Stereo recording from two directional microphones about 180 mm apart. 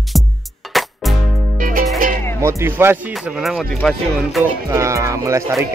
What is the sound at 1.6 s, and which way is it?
Music, 50° right (ahead or behind).